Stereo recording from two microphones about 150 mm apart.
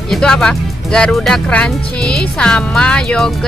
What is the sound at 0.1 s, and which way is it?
Speech, 5° left (ahead or behind).